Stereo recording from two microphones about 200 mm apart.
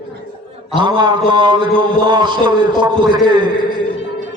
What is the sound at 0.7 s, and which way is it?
A man's voice, 25° right (ahead or behind).